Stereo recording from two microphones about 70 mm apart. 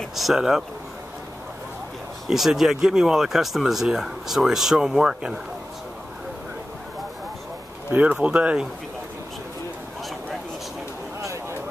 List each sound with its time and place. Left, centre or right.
0.1 s speech: centre
2.2 s speech: centre
7.9 s speech: right